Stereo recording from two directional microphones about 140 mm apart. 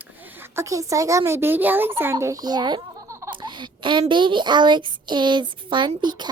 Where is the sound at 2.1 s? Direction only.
25° right (ahead or behind).